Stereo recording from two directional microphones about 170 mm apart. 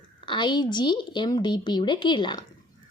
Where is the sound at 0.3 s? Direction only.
25° left (ahead or behind).